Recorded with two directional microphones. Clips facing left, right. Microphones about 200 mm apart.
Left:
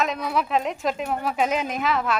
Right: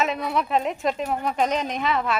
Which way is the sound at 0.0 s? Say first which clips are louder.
Even; centre (ahead or behind).